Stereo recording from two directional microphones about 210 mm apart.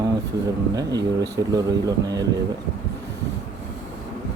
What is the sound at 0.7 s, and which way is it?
Speech, 20° right (ahead or behind).